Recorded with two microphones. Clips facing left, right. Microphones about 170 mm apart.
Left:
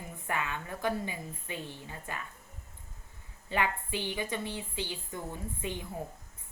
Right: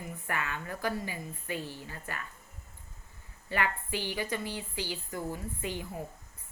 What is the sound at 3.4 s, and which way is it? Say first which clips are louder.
A woman's voice: left 1 dB; 20° left (ahead or behind).